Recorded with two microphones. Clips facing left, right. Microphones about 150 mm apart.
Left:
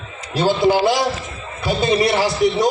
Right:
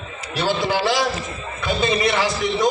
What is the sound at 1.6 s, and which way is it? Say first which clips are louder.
A man's voice: left 3 dB; 35° left (ahead or behind).